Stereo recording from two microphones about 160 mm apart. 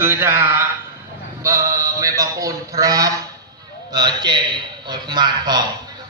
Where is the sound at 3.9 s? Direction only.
25° right (ahead or behind).